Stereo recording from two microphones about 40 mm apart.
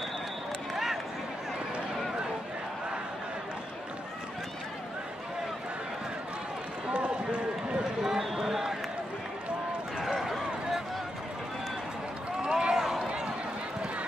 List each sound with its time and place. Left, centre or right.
8.0 s a sound: centre
9.9 s run: centre
12.4 s run: right